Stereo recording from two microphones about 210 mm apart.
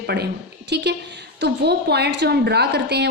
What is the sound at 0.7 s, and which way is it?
A woman's voice, 50° right (ahead or behind).